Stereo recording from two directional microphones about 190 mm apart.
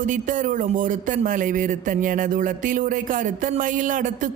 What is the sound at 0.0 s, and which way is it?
A woman's voice, 45° right (ahead or behind).